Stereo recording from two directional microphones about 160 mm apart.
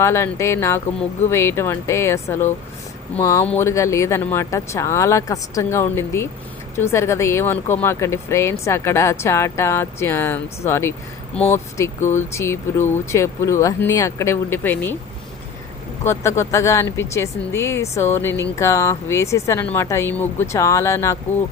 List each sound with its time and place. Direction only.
0.0 s speech: 15° left (ahead or behind)
11.9 s speech: 50° left (ahead or behind)
12.3 s speech: 15° left (ahead or behind)
16.0 s speech: 15° left (ahead or behind)